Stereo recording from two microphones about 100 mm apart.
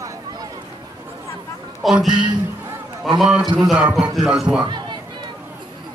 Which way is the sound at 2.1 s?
50° right (ahead or behind).